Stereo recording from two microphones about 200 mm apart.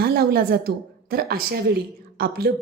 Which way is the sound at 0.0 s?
55° right (ahead or behind).